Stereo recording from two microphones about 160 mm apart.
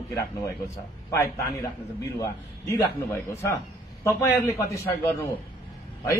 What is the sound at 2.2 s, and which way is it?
A woman's voice, 20° left (ahead or behind).